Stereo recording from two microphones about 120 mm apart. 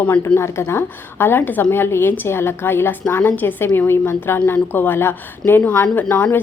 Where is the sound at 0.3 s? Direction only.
20° left (ahead or behind).